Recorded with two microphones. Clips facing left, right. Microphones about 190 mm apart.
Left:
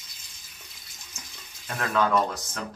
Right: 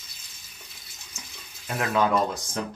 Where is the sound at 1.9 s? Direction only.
15° right (ahead or behind).